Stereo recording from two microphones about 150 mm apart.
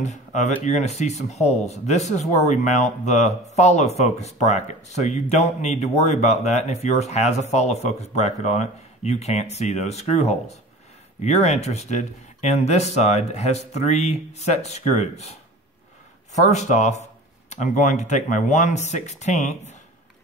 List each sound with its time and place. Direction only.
0.0 s speech: 50° left (ahead or behind)
16.3 s speech: 50° left (ahead or behind)